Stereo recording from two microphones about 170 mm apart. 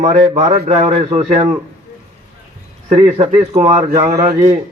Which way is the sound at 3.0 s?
40° right (ahead or behind).